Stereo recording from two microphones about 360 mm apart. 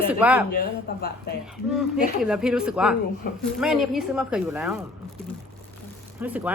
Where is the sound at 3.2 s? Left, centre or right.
Left.